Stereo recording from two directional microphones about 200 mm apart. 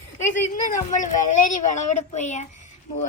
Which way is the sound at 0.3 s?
40° left (ahead or behind).